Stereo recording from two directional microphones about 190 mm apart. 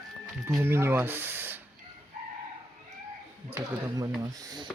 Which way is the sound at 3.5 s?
15° right (ahead or behind).